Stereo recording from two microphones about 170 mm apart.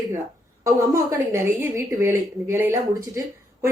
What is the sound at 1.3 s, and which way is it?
Speech, 15° right (ahead or behind).